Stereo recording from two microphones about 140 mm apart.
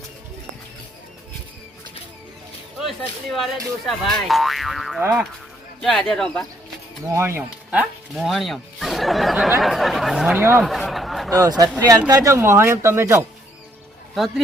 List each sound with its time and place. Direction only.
2.7 s speech: centre (ahead or behind)
5.8 s speech: centre (ahead or behind)
7.1 s speech: 15° right (ahead or behind)
10.6 s chatter: centre (ahead or behind)
11.3 s speech: 25° right (ahead or behind)